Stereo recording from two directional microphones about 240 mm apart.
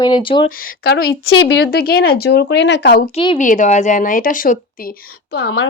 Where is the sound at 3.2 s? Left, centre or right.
Left.